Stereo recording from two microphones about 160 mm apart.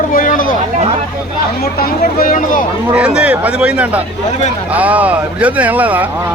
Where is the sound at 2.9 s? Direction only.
5° right (ahead or behind).